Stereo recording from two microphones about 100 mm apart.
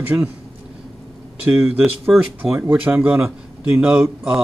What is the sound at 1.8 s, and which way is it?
Speech, 5° right (ahead or behind).